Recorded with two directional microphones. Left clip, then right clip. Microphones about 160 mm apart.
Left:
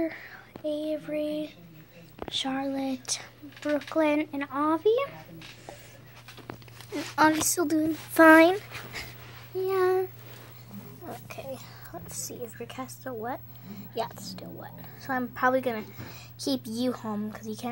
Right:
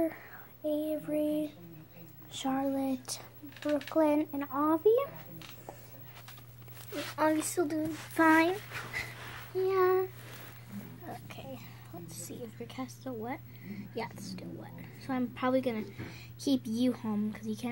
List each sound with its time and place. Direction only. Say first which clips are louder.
0.7 s a child's voice: left 2 dB; 5° left (ahead or behind)
7.2 s speech: left 6 dB; 40° left (ahead or behind)
9.6 s a sound: left 2 dB; 30° left (ahead or behind)
12.5 s a woman's voice: left 4 dB; 25° left (ahead or behind)